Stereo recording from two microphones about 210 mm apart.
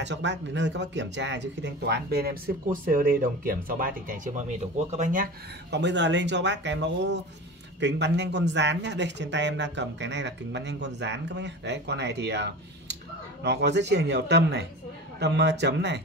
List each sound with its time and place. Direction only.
0.0 s speech: 55° right (ahead or behind)